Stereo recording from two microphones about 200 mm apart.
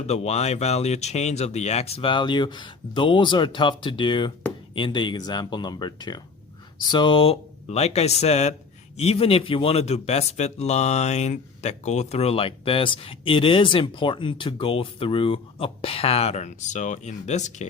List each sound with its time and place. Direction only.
0.0 s speech: 35° left (ahead or behind)